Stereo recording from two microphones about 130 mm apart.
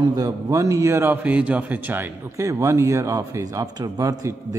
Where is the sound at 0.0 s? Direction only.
30° right (ahead or behind).